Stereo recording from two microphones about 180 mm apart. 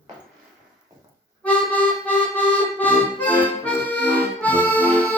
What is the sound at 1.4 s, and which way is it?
Music, 5° left (ahead or behind).